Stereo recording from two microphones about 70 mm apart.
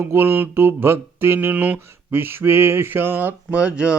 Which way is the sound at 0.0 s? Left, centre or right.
Right.